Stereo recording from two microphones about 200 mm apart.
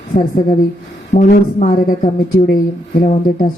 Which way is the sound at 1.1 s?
40° left (ahead or behind).